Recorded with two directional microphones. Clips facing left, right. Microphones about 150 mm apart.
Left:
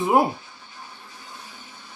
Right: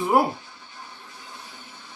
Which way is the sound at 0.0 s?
20° left (ahead or behind).